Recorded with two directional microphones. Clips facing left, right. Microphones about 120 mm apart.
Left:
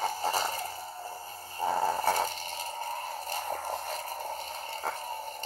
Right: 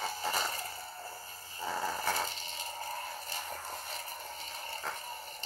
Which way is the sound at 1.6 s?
45° left (ahead or behind).